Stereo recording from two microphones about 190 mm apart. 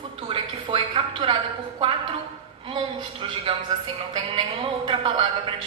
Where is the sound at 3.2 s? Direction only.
30° right (ahead or behind).